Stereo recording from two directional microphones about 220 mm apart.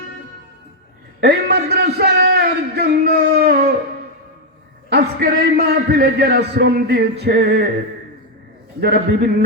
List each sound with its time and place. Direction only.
1.2 s a sound: 45° right (ahead or behind)
4.9 s a man's voice: 50° right (ahead or behind)
8.8 s a man's voice: 45° right (ahead or behind)